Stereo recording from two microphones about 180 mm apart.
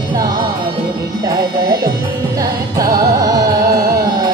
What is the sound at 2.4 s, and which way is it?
Music, 20° right (ahead or behind).